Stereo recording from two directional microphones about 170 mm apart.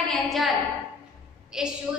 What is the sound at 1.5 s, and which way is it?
Speech, 5° right (ahead or behind).